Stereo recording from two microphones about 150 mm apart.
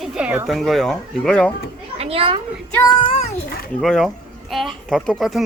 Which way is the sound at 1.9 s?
40° right (ahead or behind).